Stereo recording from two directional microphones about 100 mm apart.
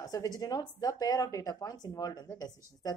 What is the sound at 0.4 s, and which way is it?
A woman's voice, 40° left (ahead or behind).